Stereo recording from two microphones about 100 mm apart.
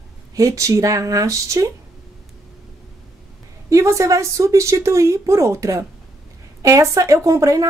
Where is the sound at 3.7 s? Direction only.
30° right (ahead or behind).